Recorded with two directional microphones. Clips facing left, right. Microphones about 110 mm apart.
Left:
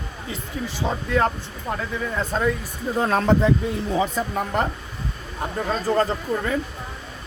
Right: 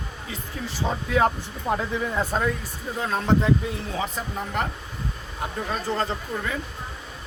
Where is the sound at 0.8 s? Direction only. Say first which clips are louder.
Even; 5° right (ahead or behind).